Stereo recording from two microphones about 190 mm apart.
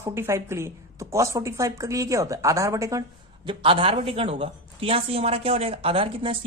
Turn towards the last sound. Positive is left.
turn(degrees=-30)  # may be behind; listen again after turning